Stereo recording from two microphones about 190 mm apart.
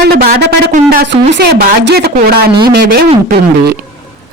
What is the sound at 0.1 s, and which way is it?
Speech, 55° right (ahead or behind).